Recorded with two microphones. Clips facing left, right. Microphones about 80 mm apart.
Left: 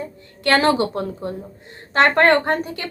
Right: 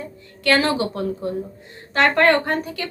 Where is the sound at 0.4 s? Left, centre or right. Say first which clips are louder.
Left 2 dB; left.